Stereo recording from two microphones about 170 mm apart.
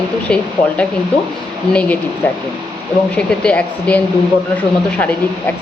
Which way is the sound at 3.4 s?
10° left (ahead or behind).